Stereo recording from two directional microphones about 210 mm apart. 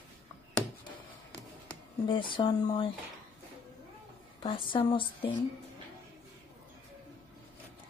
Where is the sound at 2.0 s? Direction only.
25° left (ahead or behind).